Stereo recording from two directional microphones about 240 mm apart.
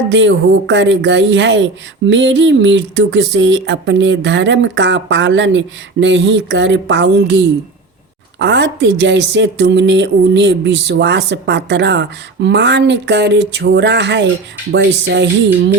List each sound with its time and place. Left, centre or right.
0.1 s speech: right